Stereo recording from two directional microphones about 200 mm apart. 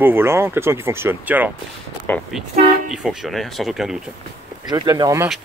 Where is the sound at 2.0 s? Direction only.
10° left (ahead or behind).